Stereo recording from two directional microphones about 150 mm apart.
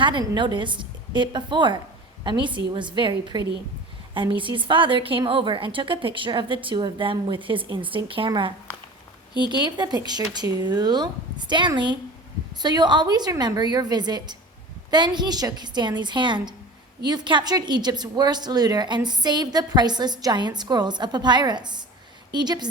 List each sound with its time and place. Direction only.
0.0 s a woman's voice: 30° right (ahead or behind)